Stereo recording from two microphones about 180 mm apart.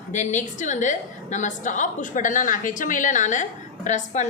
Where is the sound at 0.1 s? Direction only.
40° left (ahead or behind).